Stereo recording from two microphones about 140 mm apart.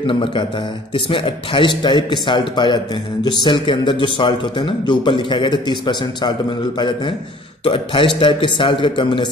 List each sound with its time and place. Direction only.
0.0 s a man's voice: 35° left (ahead or behind)